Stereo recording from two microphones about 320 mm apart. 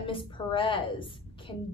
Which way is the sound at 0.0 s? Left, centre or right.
Centre.